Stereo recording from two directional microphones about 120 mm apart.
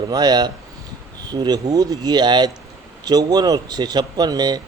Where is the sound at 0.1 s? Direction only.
35° right (ahead or behind).